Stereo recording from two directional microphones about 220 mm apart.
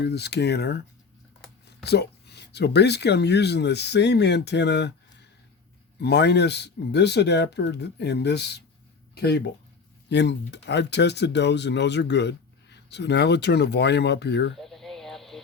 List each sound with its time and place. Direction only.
0.0 s speech: 50° left (ahead or behind)
1.8 s speech: 50° left (ahead or behind)
6.0 s speech: 50° left (ahead or behind)
14.5 s a sound: centre (ahead or behind)